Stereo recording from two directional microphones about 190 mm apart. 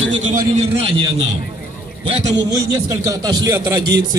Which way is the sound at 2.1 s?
35° right (ahead or behind).